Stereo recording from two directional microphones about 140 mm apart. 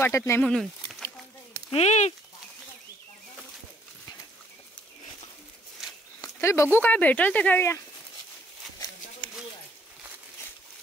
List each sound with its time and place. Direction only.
0.0 s speech: 20° left (ahead or behind)
0.4 s speech: 5° left (ahead or behind)
1.7 s speech: 50° left (ahead or behind)
6.2 s speech: 20° left (ahead or behind)